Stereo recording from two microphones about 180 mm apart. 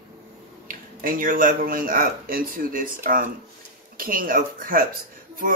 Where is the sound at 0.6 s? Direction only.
50° right (ahead or behind).